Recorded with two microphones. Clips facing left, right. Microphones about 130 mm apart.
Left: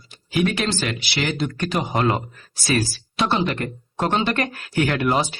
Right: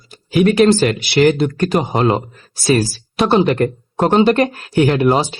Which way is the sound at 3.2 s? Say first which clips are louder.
Right 8 dB; 45° right (ahead or behind).